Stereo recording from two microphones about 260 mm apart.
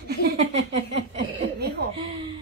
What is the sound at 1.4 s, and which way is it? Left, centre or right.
Speech, right.